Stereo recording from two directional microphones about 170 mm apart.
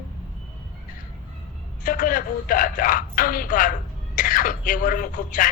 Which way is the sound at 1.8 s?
55° left (ahead or behind).